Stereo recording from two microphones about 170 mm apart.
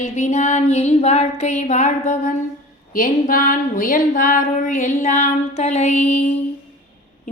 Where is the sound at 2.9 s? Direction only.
55° left (ahead or behind).